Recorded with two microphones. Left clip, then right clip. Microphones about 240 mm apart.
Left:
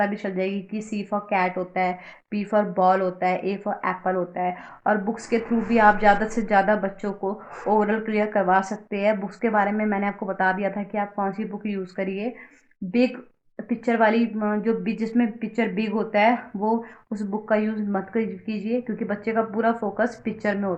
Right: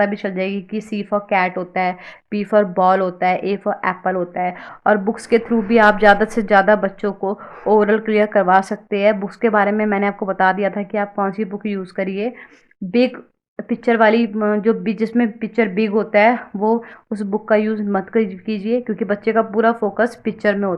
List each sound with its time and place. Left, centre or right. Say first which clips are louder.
0.0 s speech: right 5 dB; right
13.6 s speech: right 6 dB; right